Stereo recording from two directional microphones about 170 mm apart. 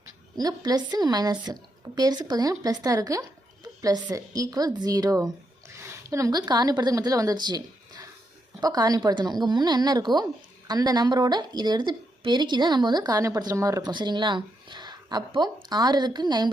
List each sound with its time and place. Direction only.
0.3 s a woman's voice: 25° right (ahead or behind)